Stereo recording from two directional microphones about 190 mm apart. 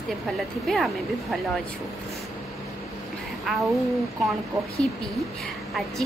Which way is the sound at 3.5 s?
Centre (ahead or behind).